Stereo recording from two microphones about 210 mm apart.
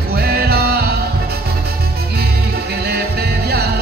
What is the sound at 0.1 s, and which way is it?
Music, 45° right (ahead or behind).